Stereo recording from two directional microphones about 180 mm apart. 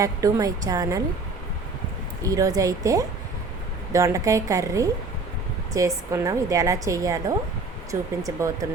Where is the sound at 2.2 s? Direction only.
20° right (ahead or behind).